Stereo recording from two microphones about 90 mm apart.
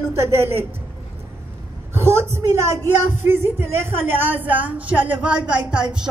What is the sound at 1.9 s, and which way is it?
A woman's voice, 30° right (ahead or behind).